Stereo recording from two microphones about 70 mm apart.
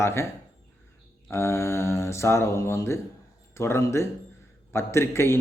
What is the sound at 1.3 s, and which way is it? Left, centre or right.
A man's voice, left.